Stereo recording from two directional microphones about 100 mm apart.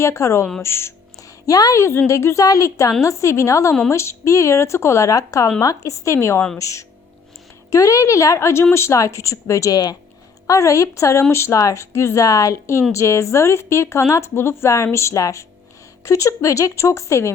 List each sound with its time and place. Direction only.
0.0 s a woman's voice: 30° left (ahead or behind)
1.5 s speech: 35° left (ahead or behind)
1.8 s a woman's voice: 25° left (ahead or behind)